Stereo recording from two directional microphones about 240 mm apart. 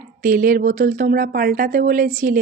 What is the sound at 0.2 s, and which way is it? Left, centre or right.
A woman's voice, right.